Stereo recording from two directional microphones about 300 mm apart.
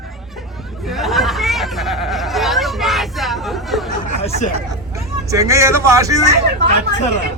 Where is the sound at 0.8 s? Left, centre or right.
Centre.